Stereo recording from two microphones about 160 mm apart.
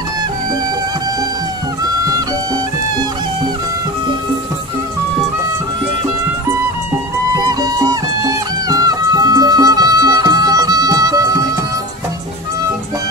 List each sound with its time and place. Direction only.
7.6 s music: 25° right (ahead or behind)